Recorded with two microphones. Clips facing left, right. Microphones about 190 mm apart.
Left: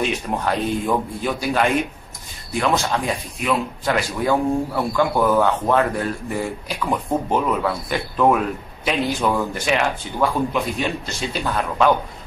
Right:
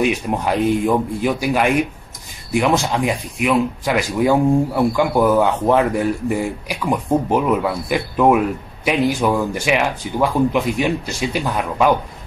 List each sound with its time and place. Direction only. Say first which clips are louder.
0.0 s speech: right 4 dB; 10° right (ahead or behind)